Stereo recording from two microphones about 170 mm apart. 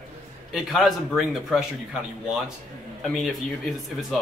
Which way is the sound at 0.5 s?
Centre (ahead or behind).